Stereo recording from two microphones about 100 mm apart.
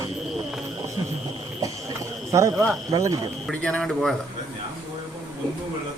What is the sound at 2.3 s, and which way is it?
Speech, 30° right (ahead or behind).